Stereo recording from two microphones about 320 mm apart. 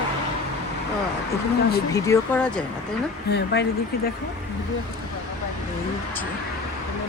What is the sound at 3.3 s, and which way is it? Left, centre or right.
Speech, left.